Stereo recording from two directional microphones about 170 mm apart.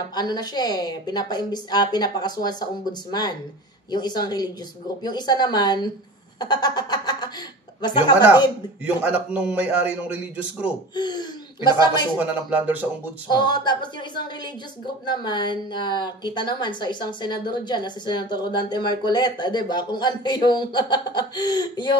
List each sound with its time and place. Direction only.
0.1 s speech: 25° left (ahead or behind)
6.4 s a sound: 25° left (ahead or behind)
8.8 s a man's voice: 10° right (ahead or behind)
11.0 s speech: 25° left (ahead or behind)
12.2 s a man's voice: 10° right (ahead or behind)
13.3 s speech: 25° left (ahead or behind)